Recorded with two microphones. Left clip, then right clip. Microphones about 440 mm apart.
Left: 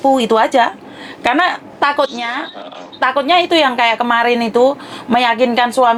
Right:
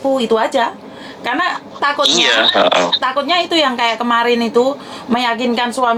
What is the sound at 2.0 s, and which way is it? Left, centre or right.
Speech, right.